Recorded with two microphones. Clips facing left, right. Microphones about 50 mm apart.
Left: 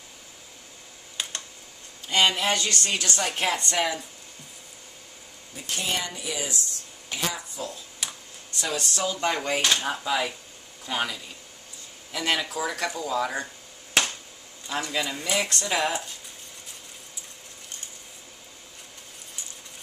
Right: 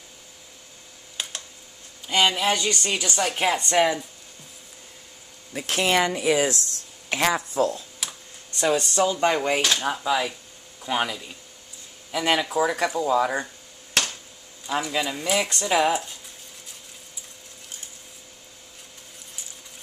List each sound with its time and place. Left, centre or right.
1.2 s a sound: centre
2.0 s a woman's voice: centre
5.5 s speech: right
8.0 s a sound: centre
8.6 s speech: centre
9.6 s speech: centre
10.8 s a woman's voice: centre
14.0 s finger snapping: centre
14.7 s a woman's voice: centre